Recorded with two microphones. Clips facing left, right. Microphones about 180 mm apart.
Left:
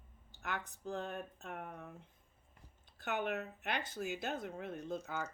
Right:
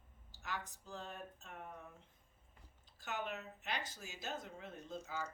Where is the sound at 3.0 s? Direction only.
60° left (ahead or behind).